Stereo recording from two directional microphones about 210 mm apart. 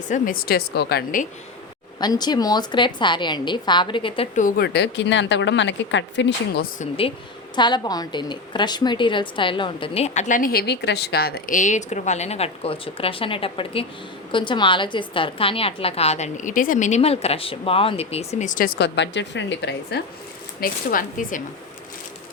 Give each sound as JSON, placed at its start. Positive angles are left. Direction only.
{"t": 0.1, "sound": "speech", "side_deg": 40}
{"t": 2.0, "sound": "a woman's voice", "side_deg": 20}
{"t": 4.4, "sound": "a woman's voice", "side_deg": 40}
{"t": 7.5, "sound": "a woman's voice", "side_deg": 20}
{"t": 20.6, "sound": "speech", "side_deg": 40}